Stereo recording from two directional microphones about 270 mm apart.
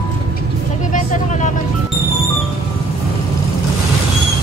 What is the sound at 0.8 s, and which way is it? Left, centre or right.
Speech, left.